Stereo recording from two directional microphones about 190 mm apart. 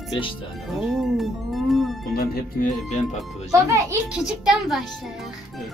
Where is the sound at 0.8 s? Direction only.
Centre (ahead or behind).